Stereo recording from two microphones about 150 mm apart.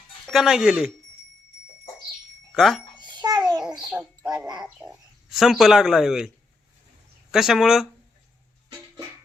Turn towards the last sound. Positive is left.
turn(degrees=-5)  # may be behind; listen again after turning